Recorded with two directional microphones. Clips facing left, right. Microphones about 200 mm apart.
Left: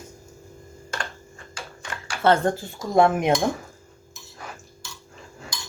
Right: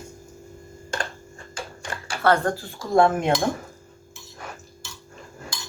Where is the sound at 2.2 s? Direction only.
20° left (ahead or behind).